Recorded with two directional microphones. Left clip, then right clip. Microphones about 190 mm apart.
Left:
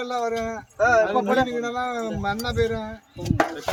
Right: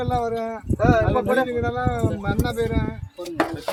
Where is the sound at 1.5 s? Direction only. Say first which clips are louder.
Right 2 dB; 55° left (ahead or behind).